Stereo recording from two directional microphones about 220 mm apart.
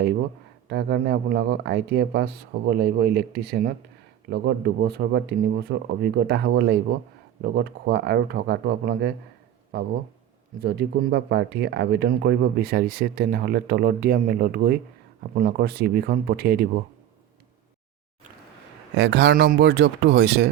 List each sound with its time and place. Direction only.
0.7 s speech: 50° right (ahead or behind)
18.9 s speech: 50° right (ahead or behind)